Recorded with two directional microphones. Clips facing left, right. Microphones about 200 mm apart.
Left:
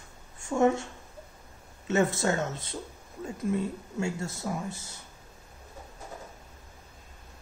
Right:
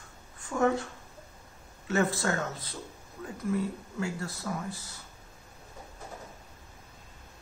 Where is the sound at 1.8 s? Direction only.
25° left (ahead or behind).